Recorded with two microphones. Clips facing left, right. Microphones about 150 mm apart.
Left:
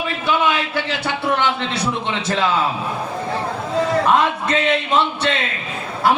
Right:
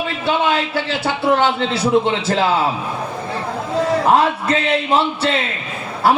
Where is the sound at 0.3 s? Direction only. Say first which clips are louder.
Right 2 dB; 35° right (ahead or behind).